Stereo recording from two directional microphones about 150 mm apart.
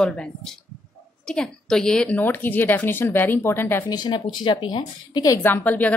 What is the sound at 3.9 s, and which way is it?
Speech, 30° left (ahead or behind).